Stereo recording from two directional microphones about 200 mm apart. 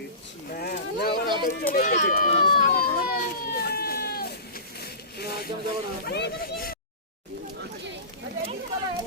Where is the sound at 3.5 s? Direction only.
50° left (ahead or behind).